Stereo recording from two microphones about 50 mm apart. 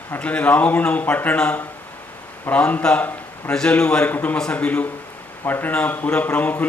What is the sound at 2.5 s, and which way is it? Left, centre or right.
Speech, left.